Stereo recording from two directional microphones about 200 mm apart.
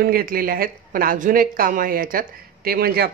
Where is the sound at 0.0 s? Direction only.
45° right (ahead or behind).